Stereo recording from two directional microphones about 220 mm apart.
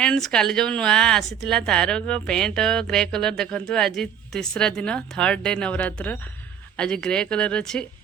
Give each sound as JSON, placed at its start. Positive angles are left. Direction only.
{"t": 0.0, "sound": "speech", "side_deg": 5}